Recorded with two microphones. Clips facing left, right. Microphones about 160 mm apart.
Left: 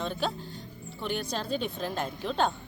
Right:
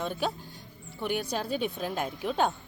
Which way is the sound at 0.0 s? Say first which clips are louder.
Even; 10° right (ahead or behind).